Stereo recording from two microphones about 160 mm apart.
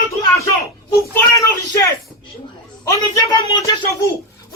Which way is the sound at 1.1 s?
20° left (ahead or behind).